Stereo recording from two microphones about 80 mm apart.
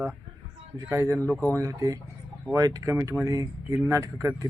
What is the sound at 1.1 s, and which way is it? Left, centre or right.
Speech, centre.